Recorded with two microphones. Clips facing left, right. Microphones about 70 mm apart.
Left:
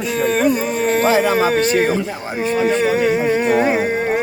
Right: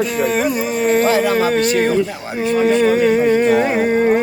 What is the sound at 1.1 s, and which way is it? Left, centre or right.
Speech, left.